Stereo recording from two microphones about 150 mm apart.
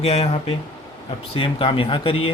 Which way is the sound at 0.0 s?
45° left (ahead or behind).